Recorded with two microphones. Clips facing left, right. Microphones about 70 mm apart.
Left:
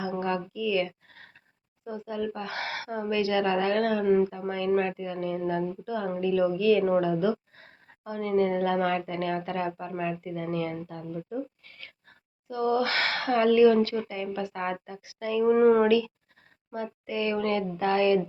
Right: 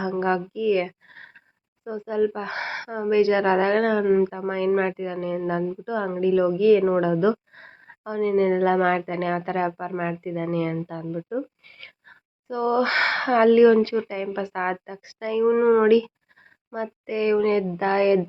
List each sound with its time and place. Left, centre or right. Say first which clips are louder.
0.0 s a sound: right 6 dB; right
1.8 s speech: right 8 dB; right
15.4 s speech: right 2 dB; centre
15.8 s speech: right 5 dB; right